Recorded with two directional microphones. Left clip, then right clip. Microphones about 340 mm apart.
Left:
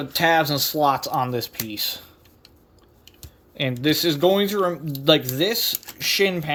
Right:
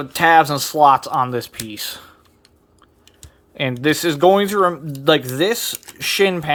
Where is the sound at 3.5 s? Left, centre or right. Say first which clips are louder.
Right 3 dB; centre.